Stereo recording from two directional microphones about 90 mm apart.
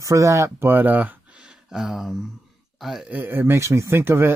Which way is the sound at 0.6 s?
20° right (ahead or behind).